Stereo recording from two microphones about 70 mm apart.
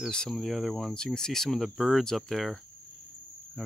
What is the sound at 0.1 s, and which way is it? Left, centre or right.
Speech, centre.